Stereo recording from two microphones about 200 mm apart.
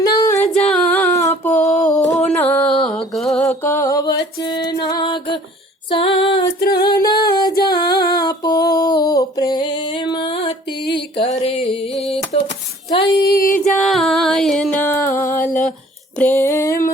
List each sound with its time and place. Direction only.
0.0 s singing: 20° left (ahead or behind)
0.7 s a sound: 5° left (ahead or behind)
2.1 s music: 5° left (ahead or behind)
3.4 s music: 15° left (ahead or behind)
5.9 s female singing: 25° left (ahead or behind)
6.6 s female singing: 50° left (ahead or behind)
6.8 s music: 20° left (ahead or behind)
11.2 s a sound: 30° left (ahead or behind)
12.9 s female singing: 25° left (ahead or behind)
13.7 s music: centre (ahead or behind)
16.1 s a sound: 10° left (ahead or behind)